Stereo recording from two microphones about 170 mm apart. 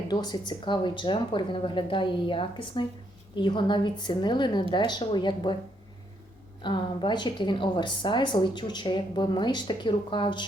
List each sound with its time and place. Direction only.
0.1 s a woman's voice: 25° left (ahead or behind)
6.6 s a woman's voice: 25° left (ahead or behind)